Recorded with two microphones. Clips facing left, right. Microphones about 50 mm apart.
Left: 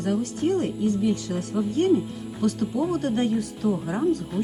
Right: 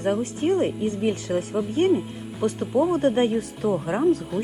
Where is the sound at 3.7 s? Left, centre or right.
Right.